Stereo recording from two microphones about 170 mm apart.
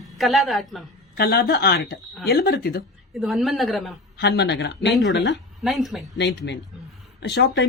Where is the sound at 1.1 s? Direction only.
65° left (ahead or behind).